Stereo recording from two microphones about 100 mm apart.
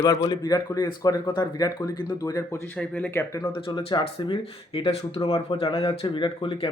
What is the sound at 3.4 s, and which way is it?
Speech, 55° left (ahead or behind).